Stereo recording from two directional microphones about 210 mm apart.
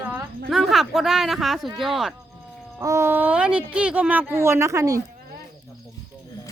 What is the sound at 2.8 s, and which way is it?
Speech, 15° right (ahead or behind).